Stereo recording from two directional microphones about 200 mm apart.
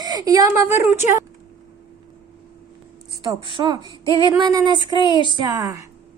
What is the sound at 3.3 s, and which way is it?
A woman's voice, 25° right (ahead or behind).